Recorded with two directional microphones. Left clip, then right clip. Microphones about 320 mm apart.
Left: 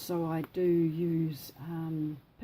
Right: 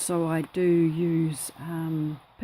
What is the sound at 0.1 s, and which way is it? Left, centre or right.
Speech, right.